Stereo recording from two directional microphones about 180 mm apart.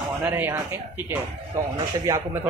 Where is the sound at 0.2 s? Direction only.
10° right (ahead or behind).